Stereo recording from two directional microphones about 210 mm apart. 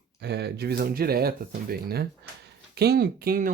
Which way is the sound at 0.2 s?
50° right (ahead or behind).